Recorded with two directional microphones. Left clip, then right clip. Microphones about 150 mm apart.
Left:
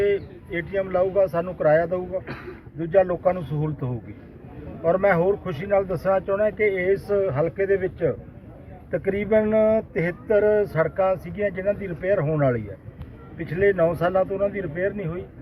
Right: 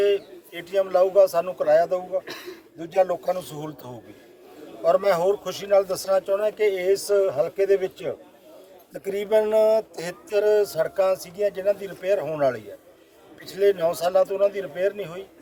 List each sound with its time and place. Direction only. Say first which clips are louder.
0.0 s speech: right 1 dB; 25° right (ahead or behind)
2.2 s speech: even; 40° right (ahead or behind)
2.7 s speech: left 2 dB; 25° right (ahead or behind)
9.1 s speech: right 1 dB; 30° right (ahead or behind)